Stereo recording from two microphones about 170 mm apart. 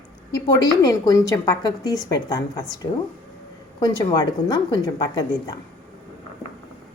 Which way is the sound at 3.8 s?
25° left (ahead or behind).